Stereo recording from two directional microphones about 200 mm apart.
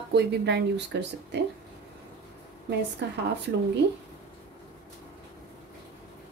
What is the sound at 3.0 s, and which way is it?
Speech, 60° right (ahead or behind).